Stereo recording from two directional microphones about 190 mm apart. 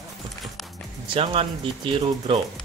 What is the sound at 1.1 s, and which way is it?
Speech, 30° right (ahead or behind).